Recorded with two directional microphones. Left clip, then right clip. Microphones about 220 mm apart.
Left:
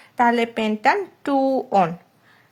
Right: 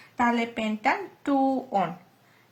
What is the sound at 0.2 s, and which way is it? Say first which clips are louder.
Speech: left 7 dB; 50° left (ahead or behind).